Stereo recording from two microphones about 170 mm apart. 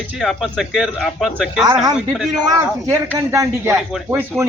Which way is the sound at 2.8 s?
15° right (ahead or behind).